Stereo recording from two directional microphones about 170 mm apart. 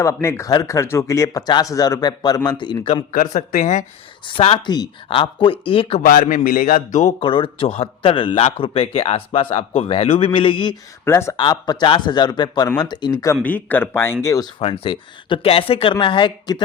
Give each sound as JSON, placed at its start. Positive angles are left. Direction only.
{"t": 0.0, "sound": "speech", "side_deg": 15}
{"t": 3.1, "sound": "a man's voice", "side_deg": 50}
{"t": 4.3, "sound": "speech", "side_deg": 30}
{"t": 6.0, "sound": "a man's voice", "side_deg": 55}
{"t": 7.2, "sound": "speech", "side_deg": 30}
{"t": 11.0, "sound": "speech", "side_deg": 15}
{"t": 11.3, "sound": "speech", "side_deg": 25}
{"t": 13.4, "sound": "speech", "side_deg": 10}
{"t": 14.6, "sound": "speech", "side_deg": 30}